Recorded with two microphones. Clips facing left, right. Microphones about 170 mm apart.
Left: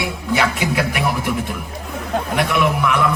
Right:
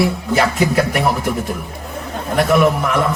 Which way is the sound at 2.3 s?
40° right (ahead or behind).